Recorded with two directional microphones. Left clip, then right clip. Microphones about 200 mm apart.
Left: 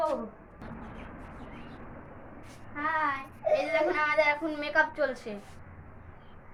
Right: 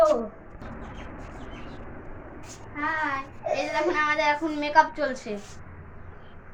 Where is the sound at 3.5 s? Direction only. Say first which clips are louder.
Right 1 dB; 15° left (ahead or behind).